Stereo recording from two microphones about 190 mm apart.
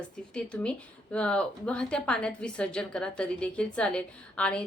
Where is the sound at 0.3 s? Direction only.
5° left (ahead or behind).